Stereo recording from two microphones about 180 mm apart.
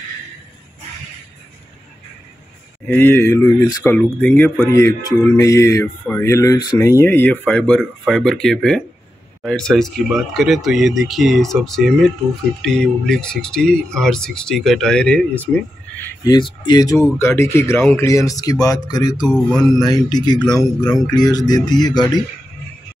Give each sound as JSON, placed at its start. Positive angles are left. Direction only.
{"t": 2.9, "sound": "speech", "side_deg": 10}
{"t": 16.3, "sound": "speech", "side_deg": 25}